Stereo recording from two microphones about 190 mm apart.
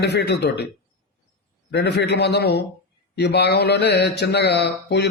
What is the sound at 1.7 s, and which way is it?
A man's voice, 65° left (ahead or behind).